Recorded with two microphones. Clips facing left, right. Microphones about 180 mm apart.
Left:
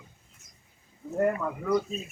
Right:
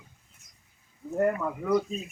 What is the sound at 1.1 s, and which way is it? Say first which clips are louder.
Speech: even; centre (ahead or behind).